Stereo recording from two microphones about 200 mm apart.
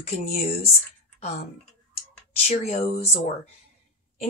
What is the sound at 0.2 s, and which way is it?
Speech, 30° left (ahead or behind).